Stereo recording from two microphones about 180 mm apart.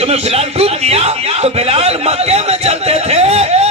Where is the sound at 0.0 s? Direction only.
35° right (ahead or behind).